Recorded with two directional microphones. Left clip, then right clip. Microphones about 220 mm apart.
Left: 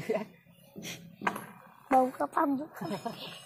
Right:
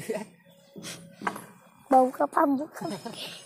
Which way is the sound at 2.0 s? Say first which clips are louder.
Right 5 dB; 20° right (ahead or behind).